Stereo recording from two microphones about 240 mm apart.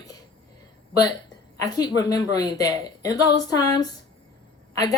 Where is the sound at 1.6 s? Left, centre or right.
Centre.